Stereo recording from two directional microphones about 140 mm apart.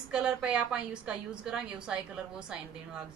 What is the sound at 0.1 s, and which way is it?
A woman's voice, 5° right (ahead or behind).